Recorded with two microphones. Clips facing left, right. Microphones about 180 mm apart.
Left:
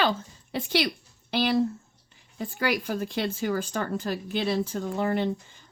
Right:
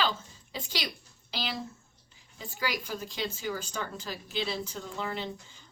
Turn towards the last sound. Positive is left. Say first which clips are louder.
# left 10 dB
turn(degrees=50)  # may be behind; listen again after turning